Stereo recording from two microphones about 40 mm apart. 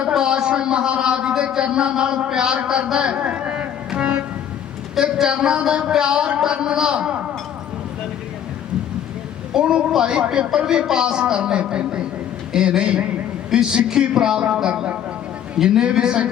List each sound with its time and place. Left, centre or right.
0.2 s a sound: centre
1.4 s a man's voice: right
2.6 s music: right
4.9 s a man's voice: centre
9.6 s a man's voice: centre